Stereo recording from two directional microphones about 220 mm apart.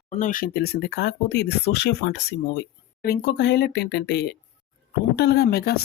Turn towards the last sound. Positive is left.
turn(degrees=45)  # may be behind; listen again after turning